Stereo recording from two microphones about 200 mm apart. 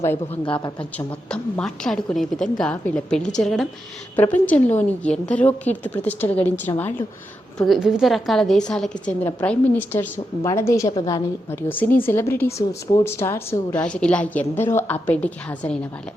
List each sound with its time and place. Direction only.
0.4 s speech: 25° left (ahead or behind)
0.9 s a woman's voice: 5° left (ahead or behind)
7.7 s a woman's voice: 5° right (ahead or behind)